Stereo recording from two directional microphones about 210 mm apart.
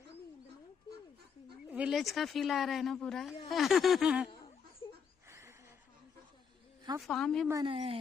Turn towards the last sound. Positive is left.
turn(degrees=-25)  # may be behind; listen again after turning